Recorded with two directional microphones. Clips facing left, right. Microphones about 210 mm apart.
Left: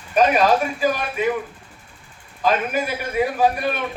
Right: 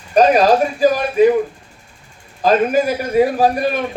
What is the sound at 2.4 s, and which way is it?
Speech, 40° right (ahead or behind).